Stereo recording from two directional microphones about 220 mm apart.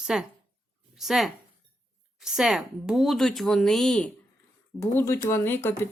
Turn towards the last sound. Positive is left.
turn(degrees=10)  # may be behind; listen again after turning